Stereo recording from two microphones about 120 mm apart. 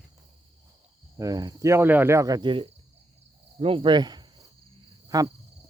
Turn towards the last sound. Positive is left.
turn(degrees=-25)  # may be behind; listen again after turning